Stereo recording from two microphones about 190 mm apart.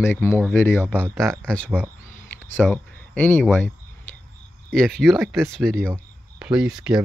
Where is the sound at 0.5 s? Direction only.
10° left (ahead or behind).